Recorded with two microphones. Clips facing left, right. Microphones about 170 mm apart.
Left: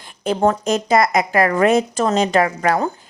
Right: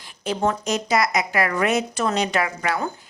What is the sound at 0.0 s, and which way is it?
A woman's voice, 50° left (ahead or behind).